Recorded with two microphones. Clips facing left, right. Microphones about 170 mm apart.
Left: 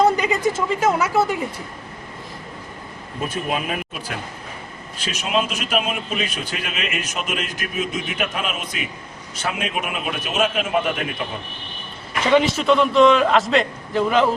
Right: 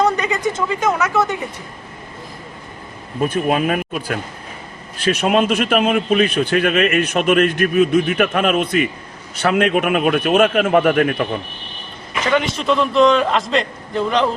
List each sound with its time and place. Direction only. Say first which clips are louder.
0.2 s speech: even; 10° left (ahead or behind)
3.2 s a man's voice: right 7 dB; 55° right (ahead or behind)
12.3 s a man's voice: left 2 dB; centre (ahead or behind)